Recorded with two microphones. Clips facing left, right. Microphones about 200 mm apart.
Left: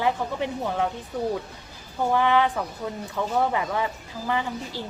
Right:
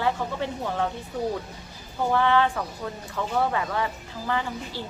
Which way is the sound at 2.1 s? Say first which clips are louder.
Even; 15° left (ahead or behind).